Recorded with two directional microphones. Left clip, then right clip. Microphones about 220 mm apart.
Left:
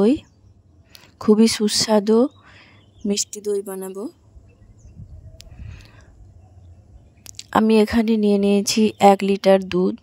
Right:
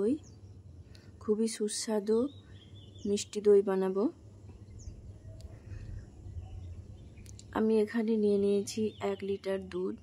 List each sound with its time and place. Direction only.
0.0 s speech: 40° left (ahead or behind)
3.3 s a woman's voice: centre (ahead or behind)
7.2 s speech: 45° left (ahead or behind)